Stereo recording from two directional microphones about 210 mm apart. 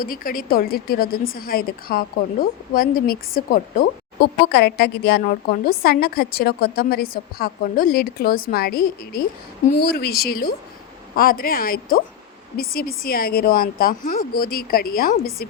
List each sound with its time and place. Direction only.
0.0 s a woman's voice: 45° left (ahead or behind)